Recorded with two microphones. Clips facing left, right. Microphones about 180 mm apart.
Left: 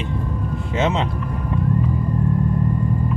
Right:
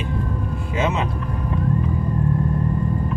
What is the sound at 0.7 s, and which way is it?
Vehicle, 25° left (ahead or behind).